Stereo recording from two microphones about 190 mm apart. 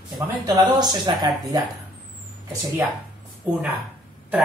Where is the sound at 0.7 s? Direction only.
20° right (ahead or behind).